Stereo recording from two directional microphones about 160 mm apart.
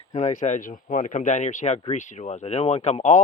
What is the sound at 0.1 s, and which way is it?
Speech, 45° left (ahead or behind).